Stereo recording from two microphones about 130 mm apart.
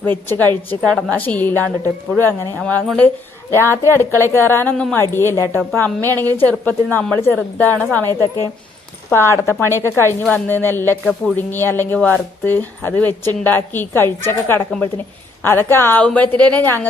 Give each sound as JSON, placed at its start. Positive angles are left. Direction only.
{"t": 0.3, "sound": "speech", "side_deg": 15}
{"t": 0.8, "sound": "a woman's voice", "side_deg": -5}
{"t": 1.1, "sound": "speech", "side_deg": 10}
{"t": 3.5, "sound": "speech", "side_deg": 20}
{"t": 4.7, "sound": "speech", "side_deg": 5}
{"t": 4.9, "sound": "a woman's voice", "side_deg": 20}